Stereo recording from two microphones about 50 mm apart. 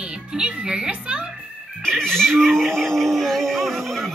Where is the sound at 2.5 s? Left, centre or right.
Centre.